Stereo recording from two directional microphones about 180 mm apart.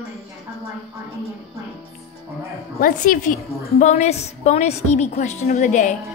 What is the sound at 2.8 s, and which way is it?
A woman's voice, 50° left (ahead or behind).